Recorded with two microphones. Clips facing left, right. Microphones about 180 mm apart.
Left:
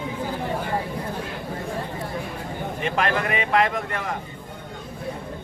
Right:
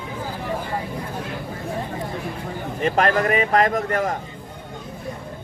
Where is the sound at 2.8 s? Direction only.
40° right (ahead or behind).